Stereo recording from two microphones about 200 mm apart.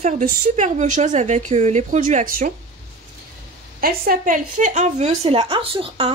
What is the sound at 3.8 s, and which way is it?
A woman's voice, 45° right (ahead or behind).